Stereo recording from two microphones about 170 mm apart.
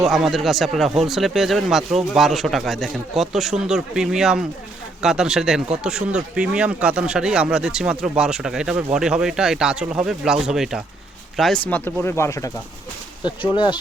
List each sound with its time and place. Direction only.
0.0 s speech: centre (ahead or behind); by 12.5 s 15° left (ahead or behind)
13.2 s speech: 25° left (ahead or behind)